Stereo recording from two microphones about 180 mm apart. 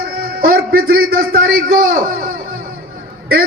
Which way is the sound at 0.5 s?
55° right (ahead or behind).